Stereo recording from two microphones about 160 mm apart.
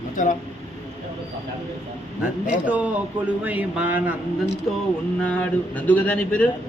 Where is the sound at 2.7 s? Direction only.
10° right (ahead or behind).